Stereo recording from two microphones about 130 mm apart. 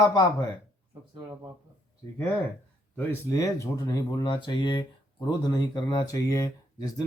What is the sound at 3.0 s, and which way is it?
Speech, 20° left (ahead or behind).